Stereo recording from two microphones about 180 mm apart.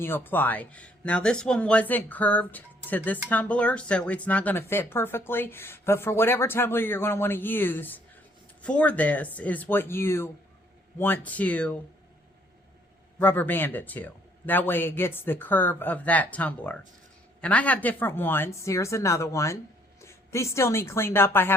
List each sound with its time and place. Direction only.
0.0 s speech: 10° left (ahead or behind)
13.1 s a woman's voice: 10° left (ahead or behind)